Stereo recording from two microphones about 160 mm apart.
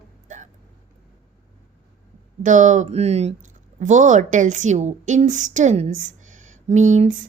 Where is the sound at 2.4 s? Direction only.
50° right (ahead or behind).